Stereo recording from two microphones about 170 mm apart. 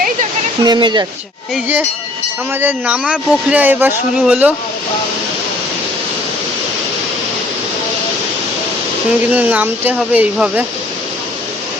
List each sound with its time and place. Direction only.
0.6 s speech: 25° right (ahead or behind)
1.5 s speech: 10° right (ahead or behind)
9.3 s speech: 10° right (ahead or behind)